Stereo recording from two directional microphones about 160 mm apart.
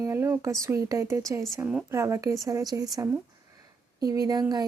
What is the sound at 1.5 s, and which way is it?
Speech, 5° right (ahead or behind).